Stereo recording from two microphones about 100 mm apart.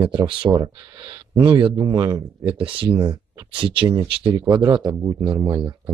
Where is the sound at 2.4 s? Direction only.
60° right (ahead or behind).